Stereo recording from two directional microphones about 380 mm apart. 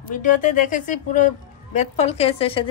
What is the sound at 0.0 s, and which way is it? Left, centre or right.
A woman's voice, left.